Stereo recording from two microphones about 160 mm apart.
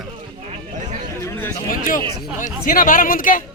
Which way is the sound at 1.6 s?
60° left (ahead or behind).